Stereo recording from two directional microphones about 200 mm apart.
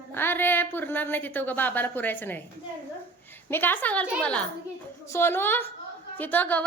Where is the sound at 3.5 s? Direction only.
10° left (ahead or behind).